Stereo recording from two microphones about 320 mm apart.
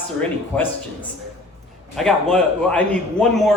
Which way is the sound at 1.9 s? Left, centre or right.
Centre.